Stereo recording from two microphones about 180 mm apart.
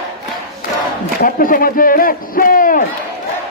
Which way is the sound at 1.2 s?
50° left (ahead or behind).